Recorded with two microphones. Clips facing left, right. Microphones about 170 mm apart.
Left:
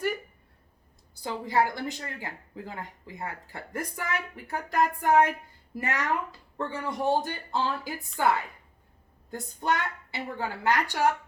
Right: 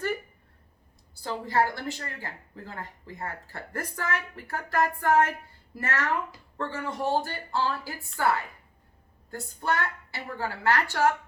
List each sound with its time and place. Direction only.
1.2 s a woman's voice: 15° left (ahead or behind)
9.3 s a woman's voice: 20° left (ahead or behind)